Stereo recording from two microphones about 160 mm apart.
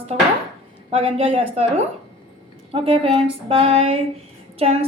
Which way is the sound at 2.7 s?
35° right (ahead or behind).